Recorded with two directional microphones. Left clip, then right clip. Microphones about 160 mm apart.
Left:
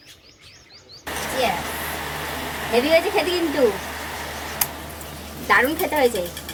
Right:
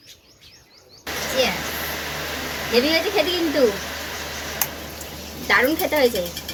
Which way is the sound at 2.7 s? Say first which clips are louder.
Left 1 dB; 15° left (ahead or behind).